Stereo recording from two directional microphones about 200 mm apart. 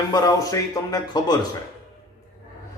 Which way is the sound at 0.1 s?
20° left (ahead or behind).